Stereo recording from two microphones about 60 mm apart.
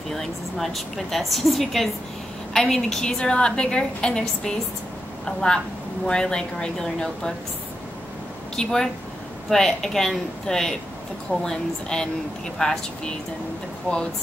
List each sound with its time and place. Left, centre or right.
0.1 s a woman's voice: centre
8.5 s a woman's voice: centre